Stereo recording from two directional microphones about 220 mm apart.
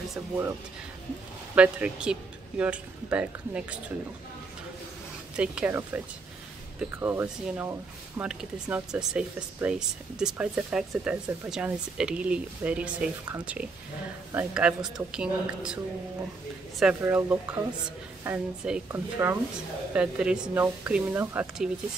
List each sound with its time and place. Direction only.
1.5 s speech: 5° right (ahead or behind)
5.3 s speech: 5° right (ahead or behind)
16.8 s speech: 5° right (ahead or behind)